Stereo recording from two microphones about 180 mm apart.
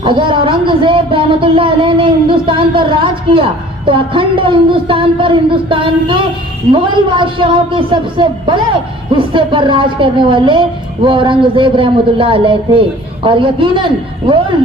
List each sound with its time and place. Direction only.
0.0 s speech: 25° right (ahead or behind)